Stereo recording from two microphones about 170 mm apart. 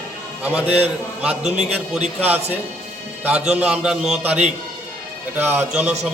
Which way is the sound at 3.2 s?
5° right (ahead or behind).